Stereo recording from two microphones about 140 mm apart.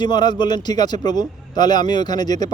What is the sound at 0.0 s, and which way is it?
Speech, 30° left (ahead or behind).